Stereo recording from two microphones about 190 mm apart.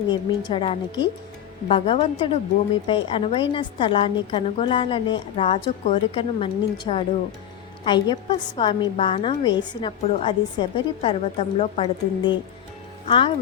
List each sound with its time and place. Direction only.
0.1 s a woman's voice: 25° left (ahead or behind)